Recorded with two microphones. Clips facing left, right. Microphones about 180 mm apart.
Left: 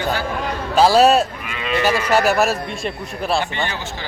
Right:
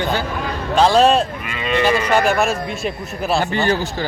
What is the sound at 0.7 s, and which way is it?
Speech, 5° left (ahead or behind).